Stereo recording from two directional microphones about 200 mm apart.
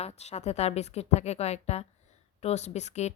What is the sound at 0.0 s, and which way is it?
Speech, 30° left (ahead or behind).